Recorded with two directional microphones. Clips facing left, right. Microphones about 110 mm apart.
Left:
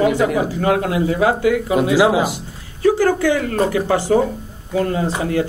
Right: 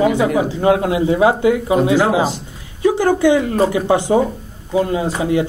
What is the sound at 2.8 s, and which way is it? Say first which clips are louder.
Speech: right 1 dB; 20° right (ahead or behind).